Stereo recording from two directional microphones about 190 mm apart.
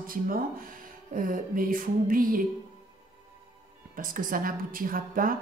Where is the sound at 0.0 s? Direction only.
50° right (ahead or behind).